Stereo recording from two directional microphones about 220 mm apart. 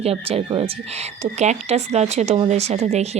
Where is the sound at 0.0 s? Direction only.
25° right (ahead or behind).